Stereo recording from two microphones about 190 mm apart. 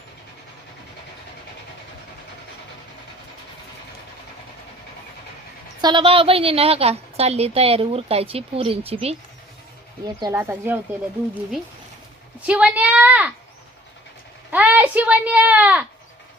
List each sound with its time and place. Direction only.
5.8 s a woman's voice: 25° right (ahead or behind)
10.2 s speech: 15° right (ahead or behind)
12.4 s a sound: 5° right (ahead or behind)
14.5 s a child's voice: 10° right (ahead or behind)